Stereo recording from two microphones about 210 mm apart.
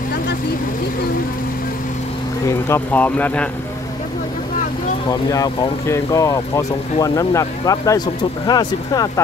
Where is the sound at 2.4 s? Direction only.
10° left (ahead or behind).